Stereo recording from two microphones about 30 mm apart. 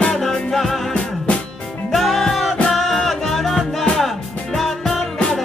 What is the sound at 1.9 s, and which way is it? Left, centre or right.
Music, centre.